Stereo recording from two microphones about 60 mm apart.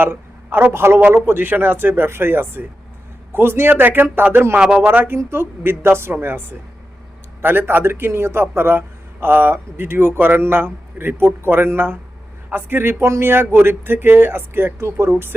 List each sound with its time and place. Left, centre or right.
0.0 s a woman's voice: right
4.5 s a man's voice: centre
4.9 s a man's voice: right
14.8 s speech: right